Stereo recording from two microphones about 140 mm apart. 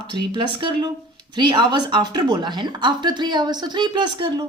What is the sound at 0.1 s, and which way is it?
A woman's voice, 35° right (ahead or behind).